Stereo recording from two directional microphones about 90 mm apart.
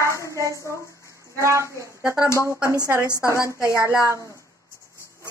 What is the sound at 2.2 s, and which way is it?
A woman's voice, 30° left (ahead or behind).